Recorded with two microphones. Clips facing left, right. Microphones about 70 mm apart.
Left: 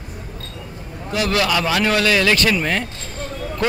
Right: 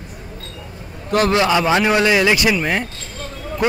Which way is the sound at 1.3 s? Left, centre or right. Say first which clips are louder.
Right 1 dB; right.